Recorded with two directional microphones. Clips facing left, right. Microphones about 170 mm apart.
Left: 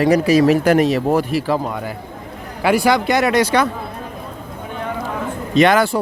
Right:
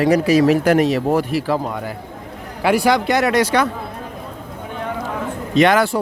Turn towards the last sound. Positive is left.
turn(degrees=35)  # may be behind; listen again after turning